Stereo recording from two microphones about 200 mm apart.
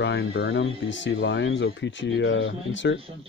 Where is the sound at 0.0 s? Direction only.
60° left (ahead or behind).